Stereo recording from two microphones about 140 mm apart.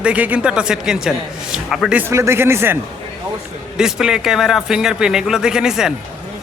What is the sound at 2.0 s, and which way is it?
Speech, 20° right (ahead or behind).